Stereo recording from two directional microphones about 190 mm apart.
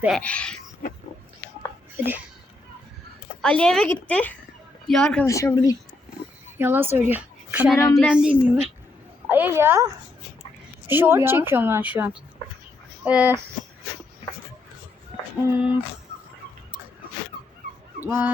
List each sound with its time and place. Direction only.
0.2 s speech: 5° left (ahead or behind)
2.0 s a woman's voice: 10° right (ahead or behind)
3.4 s a woman's voice: 5° left (ahead or behind)
5.2 s a woman's voice: 15° left (ahead or behind)
6.6 s a woman's voice: 10° right (ahead or behind)
15.4 s a woman's voice: 10° right (ahead or behind)
18.0 s speech: 10° right (ahead or behind)